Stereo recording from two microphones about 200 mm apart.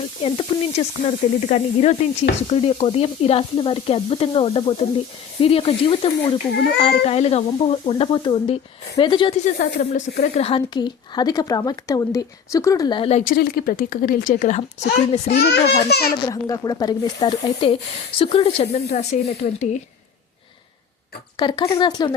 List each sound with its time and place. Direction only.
0.2 s speech: 30° left (ahead or behind)
9.6 s speech: 40° left (ahead or behind)
13.3 s a woman's voice: 50° left (ahead or behind); by 15.4 s 30° left (ahead or behind)
15.4 s a child's voice: 55° left (ahead or behind)
16.2 s speech: 15° left (ahead or behind); by 19.8 s 35° left (ahead or behind)
21.3 s speech: 20° left (ahead or behind)